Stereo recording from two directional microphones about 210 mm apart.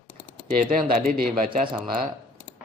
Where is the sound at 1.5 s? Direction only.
25° right (ahead or behind).